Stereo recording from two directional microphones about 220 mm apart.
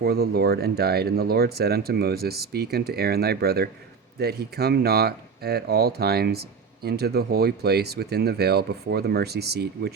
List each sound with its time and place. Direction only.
0.0 s speech: 45° right (ahead or behind)